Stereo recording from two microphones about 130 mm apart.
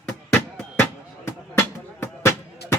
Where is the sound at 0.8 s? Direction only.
20° left (ahead or behind).